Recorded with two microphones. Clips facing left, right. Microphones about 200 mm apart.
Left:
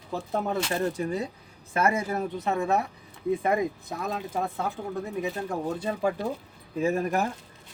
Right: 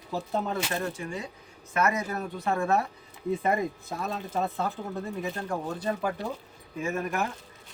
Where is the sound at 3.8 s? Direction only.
15° left (ahead or behind).